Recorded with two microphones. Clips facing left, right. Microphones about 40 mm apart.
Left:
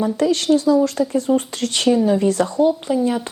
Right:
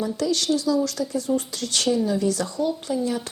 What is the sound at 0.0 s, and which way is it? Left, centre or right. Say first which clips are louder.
A woman's voice: left 6 dB; left.